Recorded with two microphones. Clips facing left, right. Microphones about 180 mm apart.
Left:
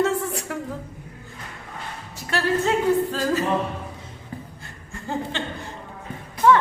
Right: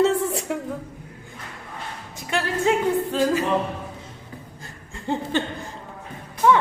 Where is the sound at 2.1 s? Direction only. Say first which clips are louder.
Left 2 dB; 15° right (ahead or behind).